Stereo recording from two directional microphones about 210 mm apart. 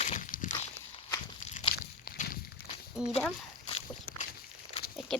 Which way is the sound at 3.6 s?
25° left (ahead or behind).